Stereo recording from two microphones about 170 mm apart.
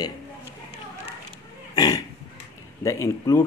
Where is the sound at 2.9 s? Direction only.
20° left (ahead or behind).